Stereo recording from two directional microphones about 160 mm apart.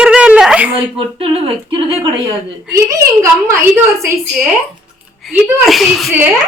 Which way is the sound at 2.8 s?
20° right (ahead or behind).